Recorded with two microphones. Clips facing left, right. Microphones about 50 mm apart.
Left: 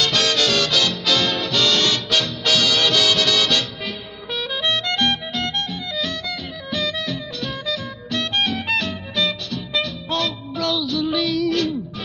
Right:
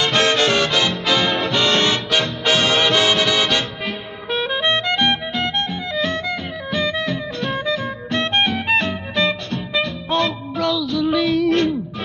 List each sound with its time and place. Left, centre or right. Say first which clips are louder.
0.0 s music: right 3 dB; right
6.7 s music: right 3 dB; right